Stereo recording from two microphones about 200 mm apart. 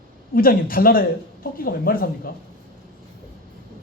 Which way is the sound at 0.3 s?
45° left (ahead or behind).